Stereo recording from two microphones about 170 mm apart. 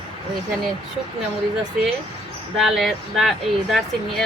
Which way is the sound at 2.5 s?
Centre (ahead or behind).